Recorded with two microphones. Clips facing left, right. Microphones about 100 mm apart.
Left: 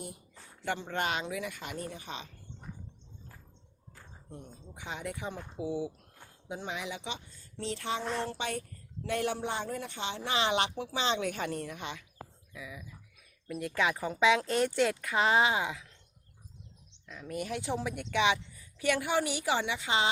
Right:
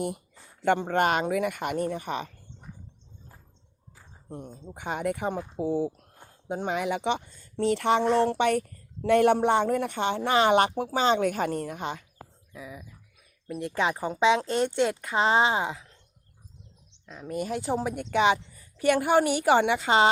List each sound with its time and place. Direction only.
0.6 s speech: 55° right (ahead or behind)
4.3 s a woman's voice: 50° right (ahead or behind)
17.1 s a woman's voice: 30° right (ahead or behind); by 20.1 s 60° right (ahead or behind)